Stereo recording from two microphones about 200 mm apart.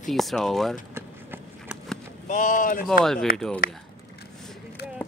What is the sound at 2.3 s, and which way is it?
Speech, 40° left (ahead or behind).